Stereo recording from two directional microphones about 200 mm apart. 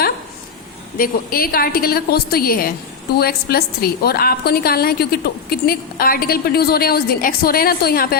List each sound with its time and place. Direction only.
0.9 s a woman's voice: 45° left (ahead or behind)